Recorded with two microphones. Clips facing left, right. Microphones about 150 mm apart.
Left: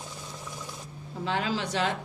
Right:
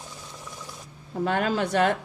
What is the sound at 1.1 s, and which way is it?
Speech, 50° right (ahead or behind).